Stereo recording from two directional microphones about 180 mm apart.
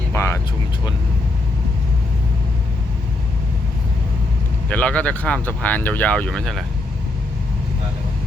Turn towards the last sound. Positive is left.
turn(degrees=5)  # may be behind; listen again after turning